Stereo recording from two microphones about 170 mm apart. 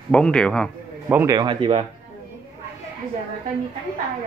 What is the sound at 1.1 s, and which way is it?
Speech, 10° right (ahead or behind).